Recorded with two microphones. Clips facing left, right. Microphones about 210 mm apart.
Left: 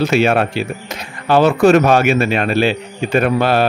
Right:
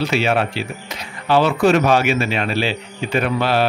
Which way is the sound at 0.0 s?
50° left (ahead or behind).